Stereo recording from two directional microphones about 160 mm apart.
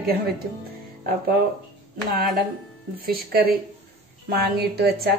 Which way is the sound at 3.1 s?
70° right (ahead or behind).